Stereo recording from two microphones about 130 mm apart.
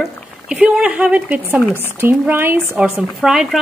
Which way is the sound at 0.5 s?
5° right (ahead or behind).